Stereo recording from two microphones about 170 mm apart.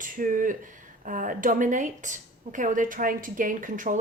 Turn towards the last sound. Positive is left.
turn(degrees=-50)  # may be behind; listen again after turning